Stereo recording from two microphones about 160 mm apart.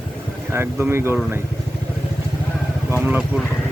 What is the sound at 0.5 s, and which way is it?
Speech, 15° right (ahead or behind).